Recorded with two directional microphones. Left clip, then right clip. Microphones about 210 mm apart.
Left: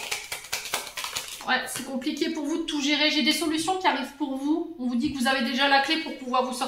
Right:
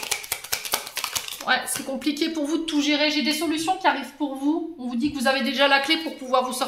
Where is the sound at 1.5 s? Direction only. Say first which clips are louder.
Right 3 dB; 55° right (ahead or behind).